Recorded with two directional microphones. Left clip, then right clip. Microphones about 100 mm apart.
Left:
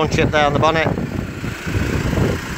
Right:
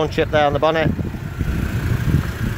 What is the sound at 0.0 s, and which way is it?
Speech, centre (ahead or behind).